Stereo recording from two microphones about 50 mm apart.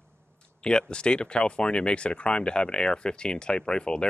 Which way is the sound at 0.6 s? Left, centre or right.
Centre.